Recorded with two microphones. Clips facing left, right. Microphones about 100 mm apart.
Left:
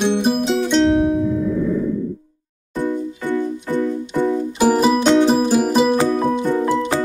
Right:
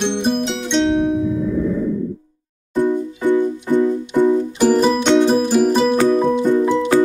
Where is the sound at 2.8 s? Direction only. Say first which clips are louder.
Right 4 dB; 15° right (ahead or behind).